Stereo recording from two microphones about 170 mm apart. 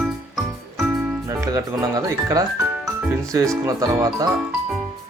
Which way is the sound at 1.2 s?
20° right (ahead or behind).